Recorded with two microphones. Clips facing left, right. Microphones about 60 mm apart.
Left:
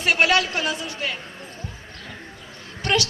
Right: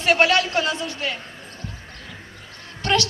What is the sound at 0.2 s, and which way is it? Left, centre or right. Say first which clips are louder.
Speech: right 1 dB; centre.